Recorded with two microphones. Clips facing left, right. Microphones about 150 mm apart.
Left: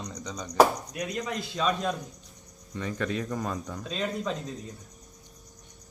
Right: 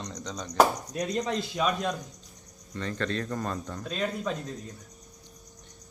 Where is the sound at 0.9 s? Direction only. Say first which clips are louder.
Right 3 dB; 35° right (ahead or behind).